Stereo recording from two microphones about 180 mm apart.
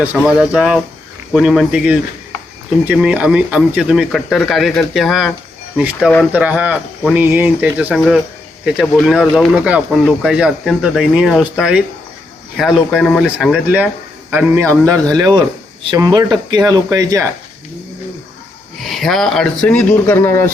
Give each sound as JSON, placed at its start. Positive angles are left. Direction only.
{"t": 0.0, "sound": "speech", "side_deg": -5}
{"t": 7.9, "sound": "speech", "side_deg": 5}
{"t": 18.8, "sound": "speech", "side_deg": 0}